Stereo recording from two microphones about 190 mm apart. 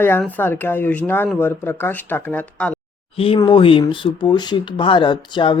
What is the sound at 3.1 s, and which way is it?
Speech, 30° left (ahead or behind).